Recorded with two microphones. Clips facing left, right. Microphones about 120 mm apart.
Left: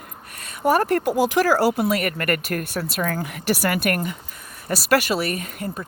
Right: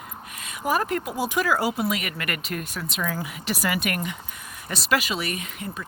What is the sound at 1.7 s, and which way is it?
Speech, 50° left (ahead or behind).